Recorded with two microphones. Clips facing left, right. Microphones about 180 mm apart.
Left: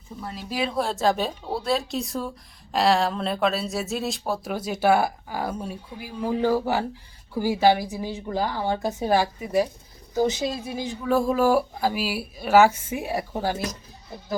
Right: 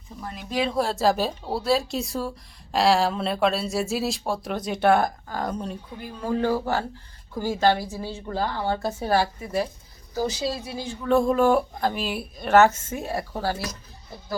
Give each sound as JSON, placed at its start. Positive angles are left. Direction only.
{"t": 0.2, "sound": "speech", "side_deg": 5}
{"t": 11.0, "sound": "speech", "side_deg": 5}